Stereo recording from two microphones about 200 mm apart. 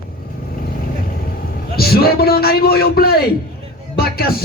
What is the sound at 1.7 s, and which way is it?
Speech, 50° left (ahead or behind).